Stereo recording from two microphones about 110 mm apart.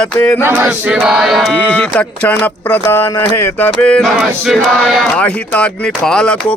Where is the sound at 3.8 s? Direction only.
10° left (ahead or behind).